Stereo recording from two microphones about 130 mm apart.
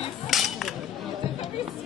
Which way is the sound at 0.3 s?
Centre (ahead or behind).